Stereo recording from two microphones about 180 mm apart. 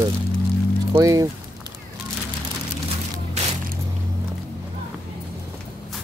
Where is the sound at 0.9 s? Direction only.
20° right (ahead or behind).